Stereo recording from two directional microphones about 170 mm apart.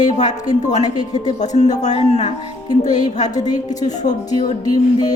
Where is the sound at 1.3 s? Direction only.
45° left (ahead or behind).